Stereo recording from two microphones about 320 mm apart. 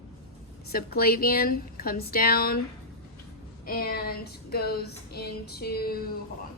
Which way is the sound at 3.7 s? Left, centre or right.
Left.